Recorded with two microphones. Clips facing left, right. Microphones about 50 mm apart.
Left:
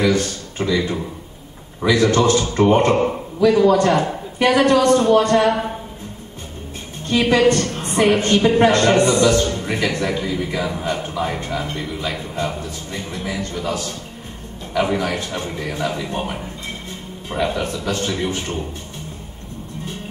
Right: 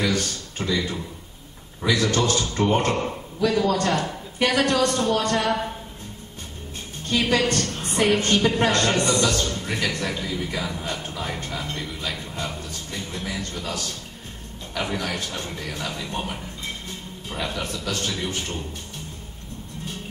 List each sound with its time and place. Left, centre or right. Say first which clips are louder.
0.0 s a sound: left 6 dB; left
0.7 s a man's voice: left 6 dB; left
7.1 s a woman's voice: left 7 dB; left